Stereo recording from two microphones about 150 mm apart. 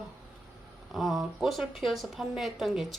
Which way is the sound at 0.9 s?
Centre (ahead or behind).